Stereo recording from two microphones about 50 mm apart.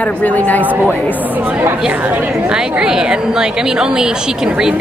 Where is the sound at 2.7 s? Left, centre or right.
Centre.